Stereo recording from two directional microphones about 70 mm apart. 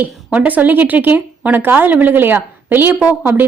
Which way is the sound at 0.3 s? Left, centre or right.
Right.